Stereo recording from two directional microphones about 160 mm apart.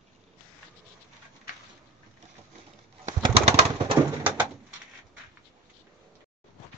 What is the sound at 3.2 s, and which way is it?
Bird, 35° right (ahead or behind).